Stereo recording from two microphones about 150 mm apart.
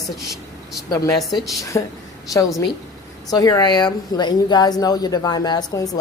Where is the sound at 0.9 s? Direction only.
25° left (ahead or behind).